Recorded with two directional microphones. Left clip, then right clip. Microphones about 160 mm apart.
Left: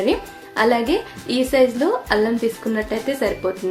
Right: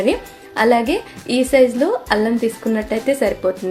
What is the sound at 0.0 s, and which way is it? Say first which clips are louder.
A woman's voice: right 2 dB; 20° right (ahead or behind).